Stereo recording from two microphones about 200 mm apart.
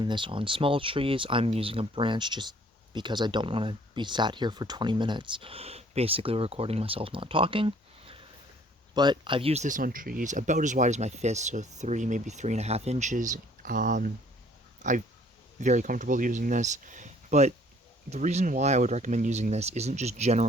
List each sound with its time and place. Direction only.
0.0 s speech: 25° right (ahead or behind)